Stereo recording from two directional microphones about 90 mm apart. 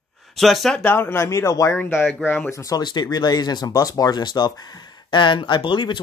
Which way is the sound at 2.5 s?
35° left (ahead or behind).